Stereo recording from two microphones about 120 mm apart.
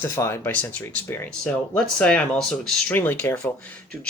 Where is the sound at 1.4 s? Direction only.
10° left (ahead or behind); by 3.5 s 25° left (ahead or behind).